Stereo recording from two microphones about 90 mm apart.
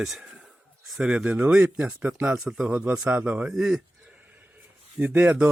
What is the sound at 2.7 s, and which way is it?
A man's voice, 20° right (ahead or behind).